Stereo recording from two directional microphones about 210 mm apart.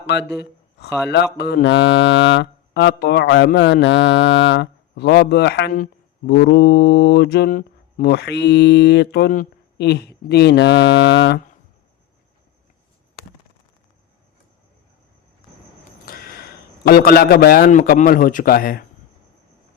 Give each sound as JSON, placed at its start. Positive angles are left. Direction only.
{"t": 1.1, "sound": "mantra", "side_deg": 55}
{"t": 16.0, "sound": "a man's voice", "side_deg": 45}